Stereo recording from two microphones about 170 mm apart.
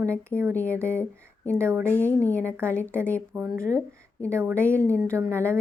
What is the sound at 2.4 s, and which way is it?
A woman's voice, 15° right (ahead or behind).